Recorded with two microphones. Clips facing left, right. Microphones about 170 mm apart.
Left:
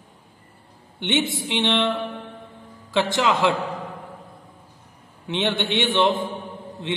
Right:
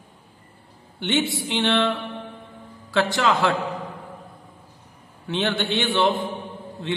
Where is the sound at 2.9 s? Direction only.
20° left (ahead or behind).